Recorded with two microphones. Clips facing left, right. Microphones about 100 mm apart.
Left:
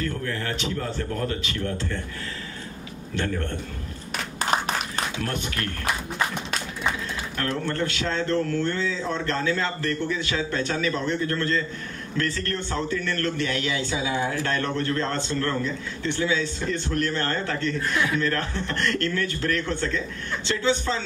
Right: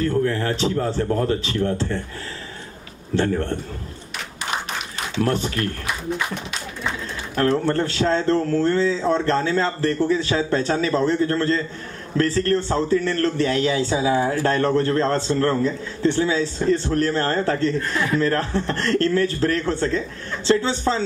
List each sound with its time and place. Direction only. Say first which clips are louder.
0.0 s speech: right 8 dB; 30° right (ahead or behind)
3.2 s speech: right 7 dB; 30° right (ahead or behind)
5.2 s speech: right 7 dB; 35° right (ahead or behind)
7.3 s speech: right 8 dB; 30° right (ahead or behind)